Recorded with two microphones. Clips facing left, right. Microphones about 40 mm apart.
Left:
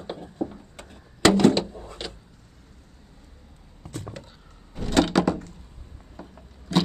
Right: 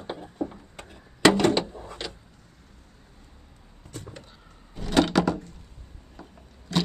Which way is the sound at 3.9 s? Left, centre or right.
Left.